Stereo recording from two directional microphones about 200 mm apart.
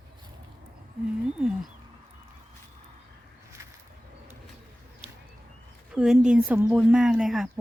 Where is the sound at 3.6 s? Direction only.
15° right (ahead or behind).